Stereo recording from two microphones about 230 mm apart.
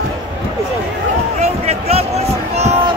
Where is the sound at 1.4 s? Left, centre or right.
Right.